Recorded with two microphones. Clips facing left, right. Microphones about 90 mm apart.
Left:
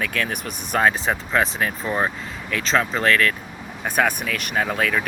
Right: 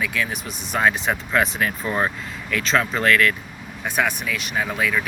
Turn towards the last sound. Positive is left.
turn(degrees=45)  # may be behind; listen again after turning